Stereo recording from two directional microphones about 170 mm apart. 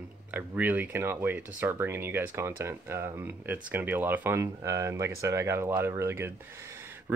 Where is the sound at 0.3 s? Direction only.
10° right (ahead or behind).